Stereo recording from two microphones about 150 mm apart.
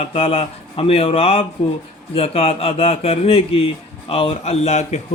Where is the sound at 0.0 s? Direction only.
40° left (ahead or behind).